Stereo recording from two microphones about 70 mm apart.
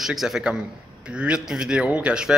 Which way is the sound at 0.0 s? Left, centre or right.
Centre.